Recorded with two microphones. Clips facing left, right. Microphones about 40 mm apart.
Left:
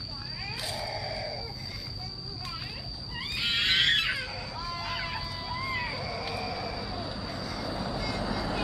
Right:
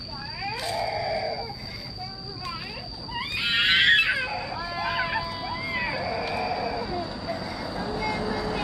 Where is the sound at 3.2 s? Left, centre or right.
Right.